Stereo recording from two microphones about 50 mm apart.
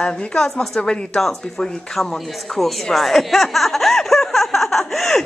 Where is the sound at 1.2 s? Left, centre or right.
Centre.